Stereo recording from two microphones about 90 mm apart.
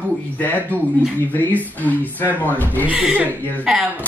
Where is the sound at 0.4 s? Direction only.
20° left (ahead or behind).